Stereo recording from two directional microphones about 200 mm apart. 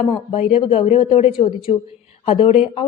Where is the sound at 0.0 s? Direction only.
25° left (ahead or behind).